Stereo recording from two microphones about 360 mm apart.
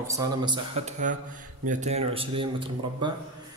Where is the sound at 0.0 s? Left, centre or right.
Centre.